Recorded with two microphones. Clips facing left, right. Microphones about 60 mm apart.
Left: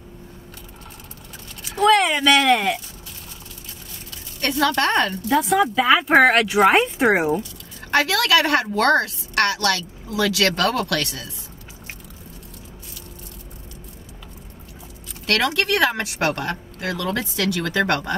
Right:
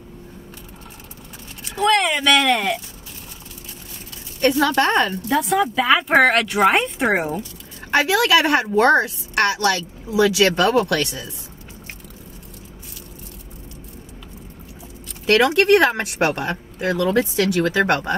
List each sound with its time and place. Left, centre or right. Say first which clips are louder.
1.6 s speech: left 2 dB; centre
4.4 s speech: right 3 dB; right
5.3 s speech: left 2 dB; centre
7.9 s speech: right 2 dB; right
15.2 s speech: right 6 dB; right